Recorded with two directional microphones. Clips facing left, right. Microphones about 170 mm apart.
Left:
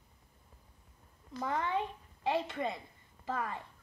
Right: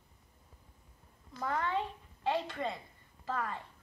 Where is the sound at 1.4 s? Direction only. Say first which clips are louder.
Even; 15° left (ahead or behind).